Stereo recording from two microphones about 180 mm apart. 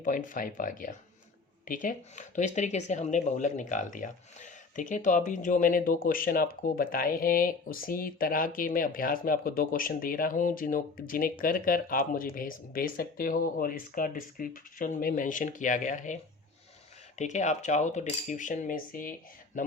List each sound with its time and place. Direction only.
0.0 s speech: 45° left (ahead or behind)
17.2 s cutlery: 40° left (ahead or behind)
19.6 s speech: 45° left (ahead or behind)